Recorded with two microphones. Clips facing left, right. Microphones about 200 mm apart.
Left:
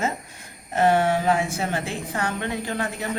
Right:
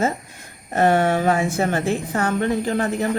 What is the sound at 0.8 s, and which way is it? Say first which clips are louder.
A woman's voice: right 2 dB; 55° right (ahead or behind).